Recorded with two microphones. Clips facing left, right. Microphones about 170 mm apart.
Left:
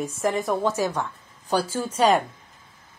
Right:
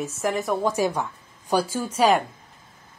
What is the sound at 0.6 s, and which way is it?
A woman's voice, 10° right (ahead or behind).